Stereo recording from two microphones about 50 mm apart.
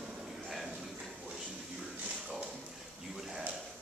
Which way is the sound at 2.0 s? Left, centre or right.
Right.